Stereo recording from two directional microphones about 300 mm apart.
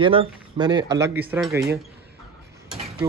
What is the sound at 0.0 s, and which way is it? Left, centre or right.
Speech, centre.